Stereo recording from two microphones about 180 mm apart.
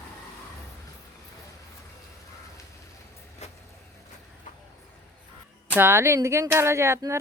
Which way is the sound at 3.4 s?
40° left (ahead or behind).